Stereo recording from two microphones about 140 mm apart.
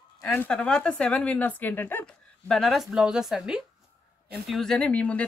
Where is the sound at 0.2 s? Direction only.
10° left (ahead or behind).